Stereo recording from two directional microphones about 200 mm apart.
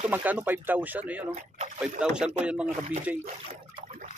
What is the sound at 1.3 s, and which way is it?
Speech, 30° right (ahead or behind).